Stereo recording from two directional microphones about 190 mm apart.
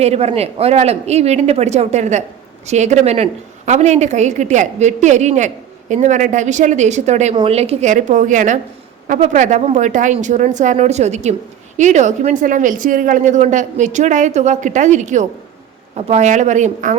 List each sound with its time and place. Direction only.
0.0 s a woman's voice: 35° right (ahead or behind)